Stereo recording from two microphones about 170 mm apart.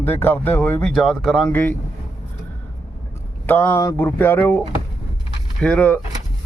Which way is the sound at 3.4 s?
10° left (ahead or behind).